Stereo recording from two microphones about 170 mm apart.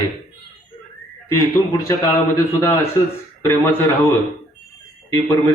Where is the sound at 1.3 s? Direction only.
20° left (ahead or behind).